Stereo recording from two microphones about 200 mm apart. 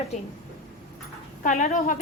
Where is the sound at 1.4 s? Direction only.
40° left (ahead or behind).